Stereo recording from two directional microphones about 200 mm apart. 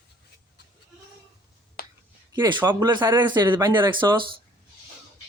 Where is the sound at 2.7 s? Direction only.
20° right (ahead or behind).